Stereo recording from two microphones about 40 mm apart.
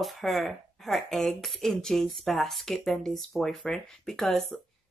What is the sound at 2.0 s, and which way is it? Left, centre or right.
Speech, centre.